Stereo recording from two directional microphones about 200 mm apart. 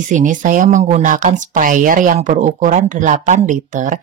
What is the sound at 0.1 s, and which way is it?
Speech, 40° right (ahead or behind).